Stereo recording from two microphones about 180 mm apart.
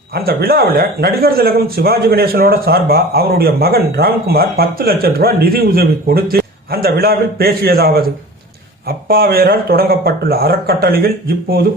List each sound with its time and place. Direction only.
0.1 s speech: 60° right (ahead or behind)